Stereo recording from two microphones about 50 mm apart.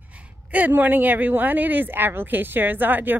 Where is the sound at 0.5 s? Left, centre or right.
Right.